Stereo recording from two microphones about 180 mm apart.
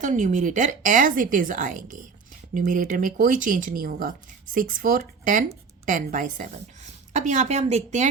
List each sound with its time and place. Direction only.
0.0 s a woman's voice: 45° right (ahead or behind)